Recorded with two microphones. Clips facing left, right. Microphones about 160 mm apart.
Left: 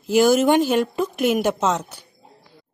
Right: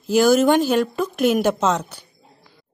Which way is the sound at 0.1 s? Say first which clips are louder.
Right 1 dB; 20° left (ahead or behind).